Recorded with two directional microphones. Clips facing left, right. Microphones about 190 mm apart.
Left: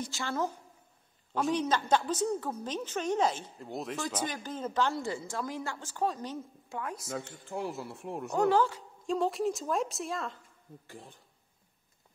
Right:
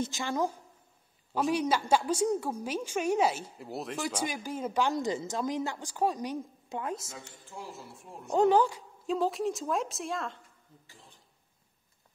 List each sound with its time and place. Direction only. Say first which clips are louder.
0.0 s a woman's voice: right 3 dB; 15° right (ahead or behind)
7.1 s speech: left 9 dB; 60° left (ahead or behind)
8.3 s a woman's voice: right 3 dB; 20° right (ahead or behind)
9.0 s a woman's voice: even; centre (ahead or behind)
10.9 s speech: left 10 dB; 55° left (ahead or behind)